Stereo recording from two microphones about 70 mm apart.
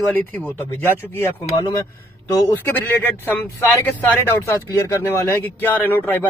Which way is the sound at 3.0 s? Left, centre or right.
Left.